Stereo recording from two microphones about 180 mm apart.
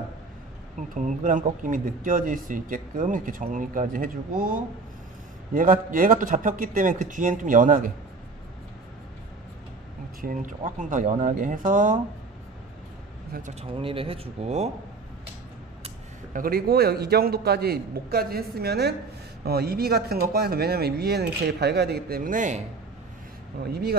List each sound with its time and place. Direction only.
0.9 s speech: 45° right (ahead or behind)
10.2 s speech: 50° right (ahead or behind)
13.3 s speech: 40° right (ahead or behind)
16.3 s speech: 55° right (ahead or behind)
23.6 s speech: 60° right (ahead or behind)